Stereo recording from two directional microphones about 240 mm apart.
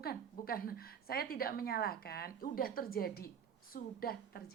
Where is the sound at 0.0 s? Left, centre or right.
Left.